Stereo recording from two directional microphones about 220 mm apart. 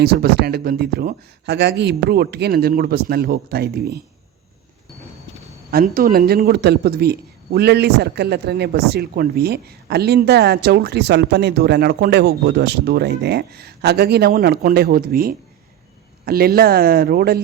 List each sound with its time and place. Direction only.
0.0 s a man's voice: 45° right (ahead or behind)
5.7 s a man's voice: 40° right (ahead or behind)